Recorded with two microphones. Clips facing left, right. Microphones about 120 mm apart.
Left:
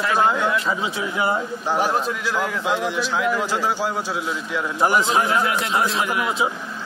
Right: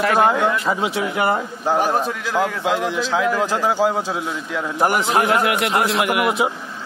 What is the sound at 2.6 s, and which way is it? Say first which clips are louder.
Speech: right 2 dB; 90° right.